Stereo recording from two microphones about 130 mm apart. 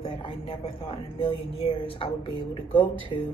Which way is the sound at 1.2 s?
45° left (ahead or behind).